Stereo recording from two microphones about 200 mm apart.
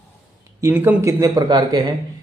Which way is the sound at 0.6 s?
10° right (ahead or behind).